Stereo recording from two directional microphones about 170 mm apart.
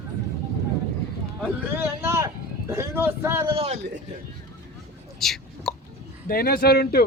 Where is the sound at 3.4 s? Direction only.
35° right (ahead or behind).